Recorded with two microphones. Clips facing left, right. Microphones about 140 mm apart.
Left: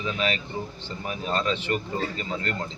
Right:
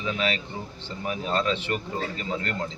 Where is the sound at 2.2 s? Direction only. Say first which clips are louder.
Even; 15° right (ahead or behind).